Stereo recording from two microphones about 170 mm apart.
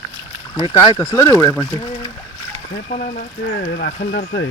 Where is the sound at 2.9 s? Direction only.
50° left (ahead or behind).